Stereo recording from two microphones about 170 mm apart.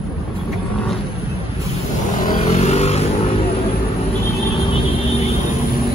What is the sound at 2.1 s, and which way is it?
Vehicle, 45° left (ahead or behind).